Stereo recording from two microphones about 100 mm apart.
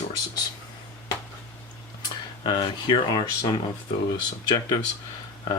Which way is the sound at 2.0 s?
50° left (ahead or behind).